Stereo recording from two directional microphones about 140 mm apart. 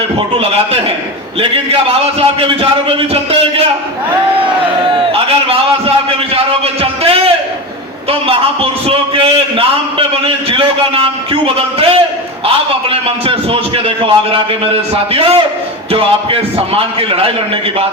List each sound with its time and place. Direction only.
0.3 s a man's voice: 45° right (ahead or behind)
6.8 s a sound: 40° right (ahead or behind)
8.1 s a man's voice: 40° right (ahead or behind)